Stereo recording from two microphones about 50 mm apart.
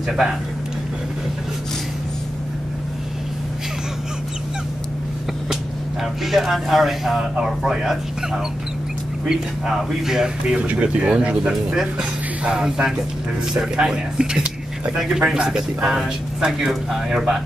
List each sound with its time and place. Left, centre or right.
0.1 s speech: centre
6.2 s speech: centre
9.7 s speech: centre
10.5 s speech: right